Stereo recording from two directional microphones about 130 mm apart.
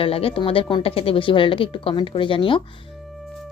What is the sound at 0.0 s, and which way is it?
A woman's voice, 45° left (ahead or behind).